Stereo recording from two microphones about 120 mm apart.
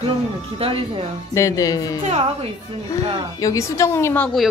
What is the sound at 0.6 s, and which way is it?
Speech, 50° right (ahead or behind).